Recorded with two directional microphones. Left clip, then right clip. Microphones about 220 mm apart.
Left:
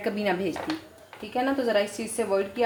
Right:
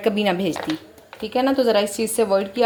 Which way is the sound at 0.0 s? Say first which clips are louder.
Right 6 dB; 35° right (ahead or behind).